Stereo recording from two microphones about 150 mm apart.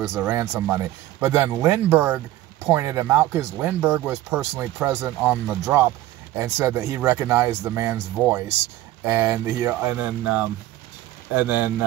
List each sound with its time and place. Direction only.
0.0 s speech: 20° right (ahead or behind)